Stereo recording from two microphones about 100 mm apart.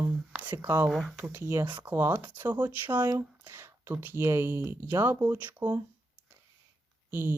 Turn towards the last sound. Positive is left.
turn(degrees=-20)  # may be behind; listen again after turning